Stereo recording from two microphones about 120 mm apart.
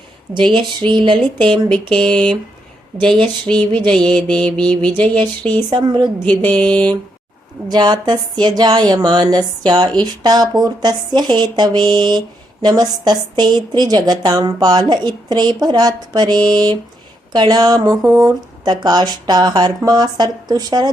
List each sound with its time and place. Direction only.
0.5 s speech: 40° right (ahead or behind)
2.1 s mantra: 10° left (ahead or behind)
3.4 s mantra: 10° left (ahead or behind)
5.1 s a woman's voice: 40° right (ahead or behind)
6.2 s mantra: 10° left (ahead or behind)
7.7 s a woman's voice: 35° right (ahead or behind)